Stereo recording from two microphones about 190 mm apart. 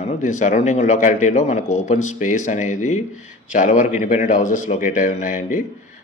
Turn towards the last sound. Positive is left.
turn(degrees=45)  # may be behind; listen again after turning